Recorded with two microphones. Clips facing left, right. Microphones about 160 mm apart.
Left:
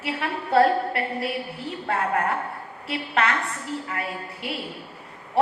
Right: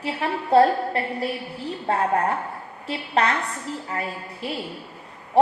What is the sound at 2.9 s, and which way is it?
Speech, 35° right (ahead or behind).